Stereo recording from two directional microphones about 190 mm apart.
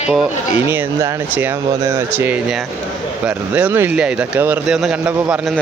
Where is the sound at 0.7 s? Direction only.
10° right (ahead or behind).